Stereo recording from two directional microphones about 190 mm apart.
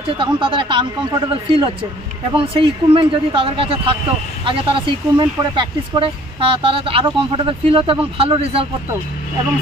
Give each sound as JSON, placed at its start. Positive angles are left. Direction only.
{"t": 0.2, "sound": "speech", "side_deg": -25}